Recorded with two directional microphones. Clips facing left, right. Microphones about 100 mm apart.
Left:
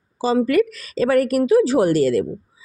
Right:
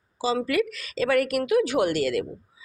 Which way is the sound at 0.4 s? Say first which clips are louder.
Left 7 dB; 45° left (ahead or behind).